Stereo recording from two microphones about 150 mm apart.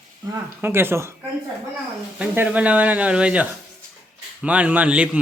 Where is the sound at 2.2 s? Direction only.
10° right (ahead or behind).